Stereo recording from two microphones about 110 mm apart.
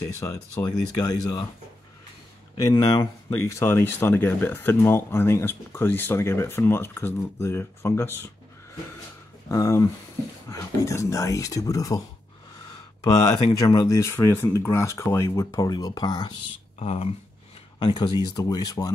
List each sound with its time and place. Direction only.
0.0 s speech: 25° left (ahead or behind)
0.7 s speech: 35° left (ahead or behind)
2.6 s speech: 35° left (ahead or behind)
3.4 s speech: 25° left (ahead or behind)
9.5 s speech: 30° left (ahead or behind)
13.0 s speech: 35° left (ahead or behind)
16.8 s speech: 65° left (ahead or behind)
17.7 s speech: 45° left (ahead or behind)